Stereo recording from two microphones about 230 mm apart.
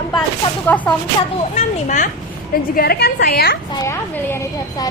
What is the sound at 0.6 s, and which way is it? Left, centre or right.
Speech, centre.